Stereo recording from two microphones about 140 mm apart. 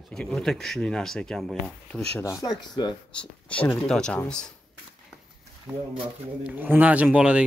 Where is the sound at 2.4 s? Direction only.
30° left (ahead or behind).